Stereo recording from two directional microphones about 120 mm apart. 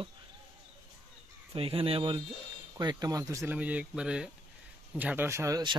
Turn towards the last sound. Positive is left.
turn(degrees=-25)  # may be behind; listen again after turning